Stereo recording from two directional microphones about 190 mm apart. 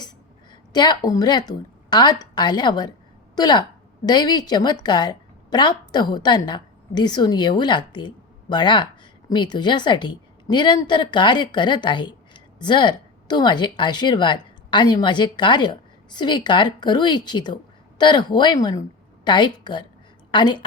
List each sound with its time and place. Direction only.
0.7 s a woman's voice: 20° left (ahead or behind)